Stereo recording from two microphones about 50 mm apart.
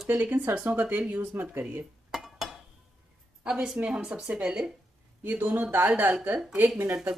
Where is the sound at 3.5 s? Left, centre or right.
Centre.